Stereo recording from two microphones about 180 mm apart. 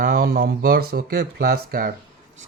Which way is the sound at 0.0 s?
55° right (ahead or behind).